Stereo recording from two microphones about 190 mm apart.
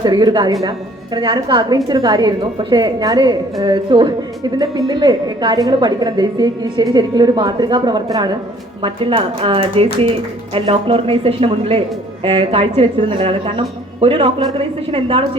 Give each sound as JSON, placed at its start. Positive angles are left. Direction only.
{"t": 0.0, "sound": "a woman's voice", "side_deg": -20}